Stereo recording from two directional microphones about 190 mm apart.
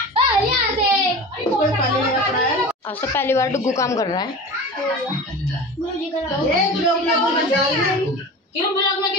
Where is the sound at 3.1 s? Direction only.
15° left (ahead or behind).